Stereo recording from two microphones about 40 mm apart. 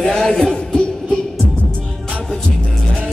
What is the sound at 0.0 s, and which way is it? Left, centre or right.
Music, centre.